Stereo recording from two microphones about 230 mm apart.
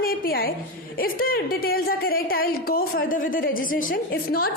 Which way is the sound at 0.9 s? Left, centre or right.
Left.